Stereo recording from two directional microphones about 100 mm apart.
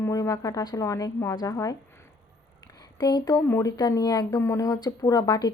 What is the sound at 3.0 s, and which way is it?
Speech, 40° left (ahead or behind).